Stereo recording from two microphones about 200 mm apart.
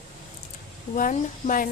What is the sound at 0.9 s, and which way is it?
Speech, 40° left (ahead or behind).